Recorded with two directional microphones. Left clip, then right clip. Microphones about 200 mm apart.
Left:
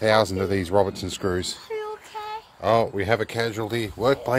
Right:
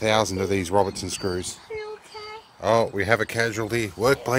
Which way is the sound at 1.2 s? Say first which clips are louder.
Left 4 dB; 15° left (ahead or behind).